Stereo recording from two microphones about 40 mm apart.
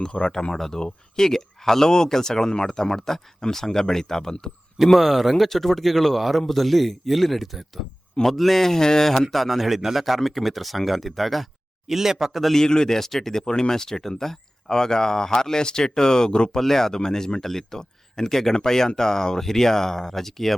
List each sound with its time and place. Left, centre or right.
0.0 s speech: centre
4.9 s a man's voice: centre
11.9 s speech: centre
12.5 s speech: centre
16.6 s speech: centre